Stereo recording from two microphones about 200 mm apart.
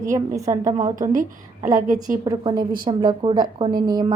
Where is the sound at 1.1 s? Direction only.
40° right (ahead or behind).